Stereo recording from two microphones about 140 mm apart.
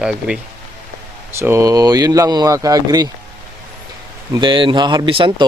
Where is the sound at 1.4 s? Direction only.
20° right (ahead or behind).